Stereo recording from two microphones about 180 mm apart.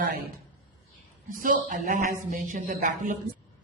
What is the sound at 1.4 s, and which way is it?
A woman's voice, 50° right (ahead or behind).